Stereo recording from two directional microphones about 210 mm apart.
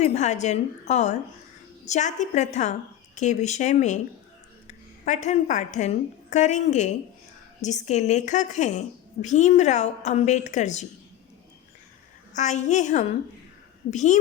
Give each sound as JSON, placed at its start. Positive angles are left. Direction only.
{"t": 0.0, "sound": "a woman's voice", "side_deg": 35}
{"t": 5.0, "sound": "a woman's voice", "side_deg": 35}
{"t": 12.4, "sound": "a woman's voice", "side_deg": 35}